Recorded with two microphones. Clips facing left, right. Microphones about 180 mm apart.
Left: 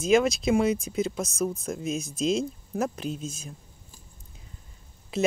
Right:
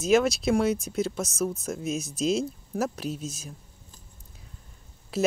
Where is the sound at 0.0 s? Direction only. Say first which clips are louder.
Even; centre (ahead or behind).